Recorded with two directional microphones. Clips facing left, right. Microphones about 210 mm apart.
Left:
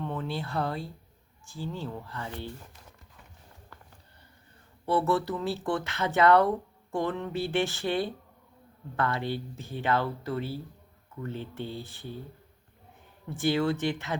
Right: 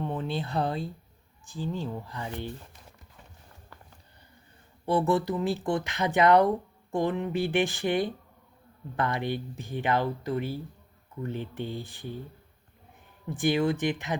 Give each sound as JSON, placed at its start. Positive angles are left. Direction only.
{"t": 0.0, "sound": "speech", "side_deg": -15}
{"t": 4.9, "sound": "speech", "side_deg": -15}
{"t": 13.3, "sound": "speech", "side_deg": -15}